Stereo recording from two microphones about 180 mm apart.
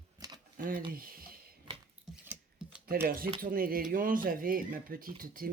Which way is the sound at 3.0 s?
55° right (ahead or behind).